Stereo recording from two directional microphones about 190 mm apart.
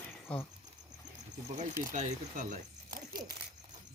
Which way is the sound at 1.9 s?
40° right (ahead or behind).